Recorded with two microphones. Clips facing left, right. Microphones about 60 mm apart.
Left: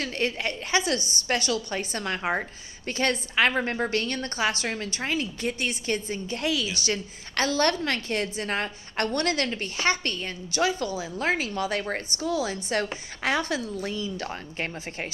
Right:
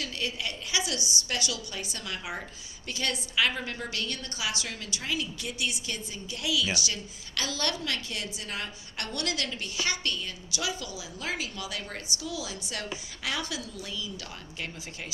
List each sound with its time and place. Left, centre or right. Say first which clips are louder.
0.0 s a woman's voice: left 6 dB; left